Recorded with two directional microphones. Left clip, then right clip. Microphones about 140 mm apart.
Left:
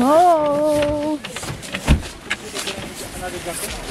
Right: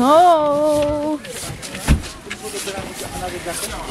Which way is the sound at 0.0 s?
10° right (ahead or behind).